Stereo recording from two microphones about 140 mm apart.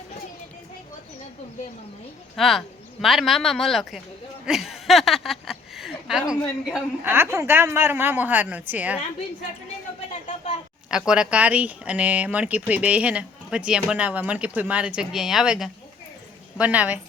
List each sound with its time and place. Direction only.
2.3 s a woman's voice: centre (ahead or behind)
7.0 s speech: 15° right (ahead or behind)
10.1 s a sound: 55° left (ahead or behind)
10.9 s speech: 5° right (ahead or behind)